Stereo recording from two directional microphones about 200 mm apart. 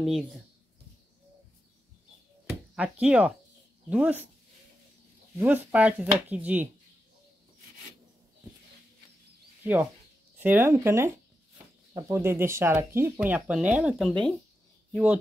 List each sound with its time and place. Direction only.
0.0 s speech: centre (ahead or behind)
2.7 s speech: 5° right (ahead or behind)
5.4 s speech: 10° right (ahead or behind)
9.6 s a sound: 10° right (ahead or behind)
10.4 s speech: 10° right (ahead or behind)